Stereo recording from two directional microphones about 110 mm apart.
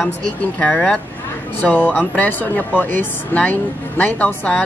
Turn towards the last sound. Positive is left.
turn(degrees=15)  # may be behind; listen again after turning